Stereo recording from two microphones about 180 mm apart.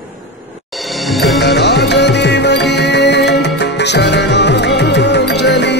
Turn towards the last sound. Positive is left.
turn(degrees=70)  # may be behind; listen again after turning